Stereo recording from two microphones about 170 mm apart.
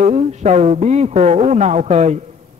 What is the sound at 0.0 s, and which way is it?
A man's voice, 40° right (ahead or behind).